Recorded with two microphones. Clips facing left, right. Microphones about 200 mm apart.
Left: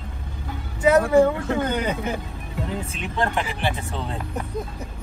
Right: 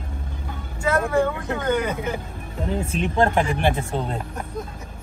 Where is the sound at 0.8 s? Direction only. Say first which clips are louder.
Left 5 dB; 15° left (ahead or behind).